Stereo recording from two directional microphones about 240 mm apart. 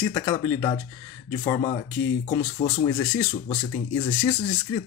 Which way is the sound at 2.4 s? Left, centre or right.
Left.